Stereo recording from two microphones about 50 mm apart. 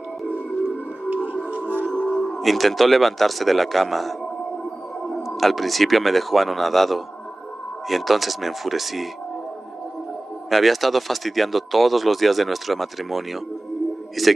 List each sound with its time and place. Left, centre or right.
1.1 s music: right
2.0 s speech: centre
5.2 s speech: centre
10.5 s speech: centre